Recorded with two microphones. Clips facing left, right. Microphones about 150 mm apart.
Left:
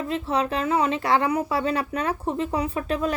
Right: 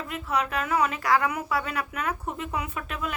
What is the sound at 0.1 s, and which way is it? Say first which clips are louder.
Speech: left 3 dB; 30° left (ahead or behind).